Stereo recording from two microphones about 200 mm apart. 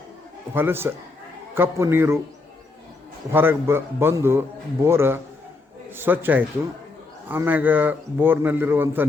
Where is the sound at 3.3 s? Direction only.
10° right (ahead or behind).